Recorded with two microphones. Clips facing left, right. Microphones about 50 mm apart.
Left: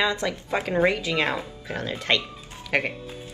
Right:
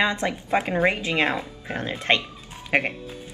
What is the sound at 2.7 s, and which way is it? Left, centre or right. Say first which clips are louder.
Speech: right 2 dB; centre.